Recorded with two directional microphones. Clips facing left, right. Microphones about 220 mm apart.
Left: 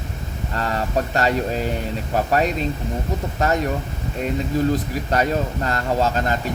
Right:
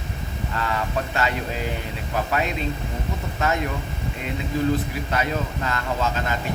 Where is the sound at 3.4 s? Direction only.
40° left (ahead or behind).